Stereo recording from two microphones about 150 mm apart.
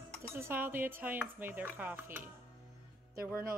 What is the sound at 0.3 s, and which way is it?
Speech, 15° right (ahead or behind).